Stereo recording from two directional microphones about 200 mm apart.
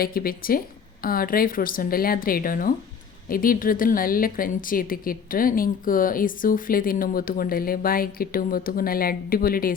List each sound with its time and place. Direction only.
0.0 s a woman's voice: 45° left (ahead or behind)